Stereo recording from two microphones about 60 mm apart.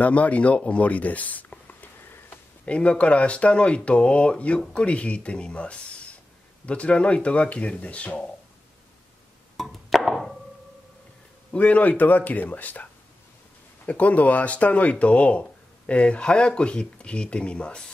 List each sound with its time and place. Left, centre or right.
0.0 s a sound: left
2.6 s speech: centre
9.6 s chop: centre
11.5 s speech: left
13.8 s speech: left